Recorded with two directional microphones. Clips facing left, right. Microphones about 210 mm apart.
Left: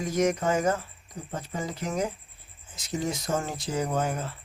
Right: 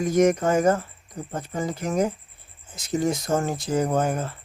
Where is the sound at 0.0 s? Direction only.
50° right (ahead or behind).